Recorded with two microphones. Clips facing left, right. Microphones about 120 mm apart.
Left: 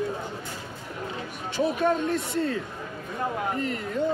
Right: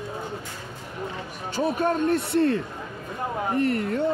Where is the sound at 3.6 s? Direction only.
60° right (ahead or behind).